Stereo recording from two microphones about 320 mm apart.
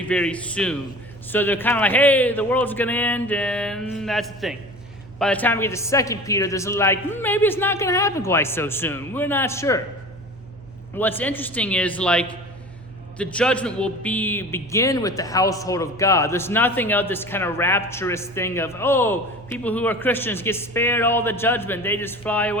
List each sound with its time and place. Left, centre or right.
0.0 s a man's voice: centre
10.9 s a man's voice: centre